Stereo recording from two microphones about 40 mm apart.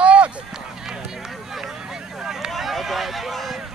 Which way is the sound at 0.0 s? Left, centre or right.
Right.